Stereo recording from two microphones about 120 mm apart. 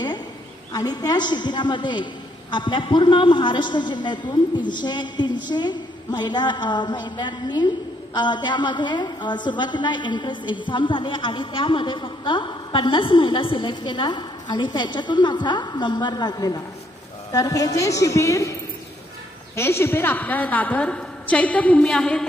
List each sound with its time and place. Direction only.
0.7 s a woman's voice: 35° left (ahead or behind)
19.5 s a woman's voice: 20° left (ahead or behind); by 22.3 s 5° left (ahead or behind)